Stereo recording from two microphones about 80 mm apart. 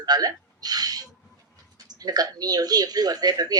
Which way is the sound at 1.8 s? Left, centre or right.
Right.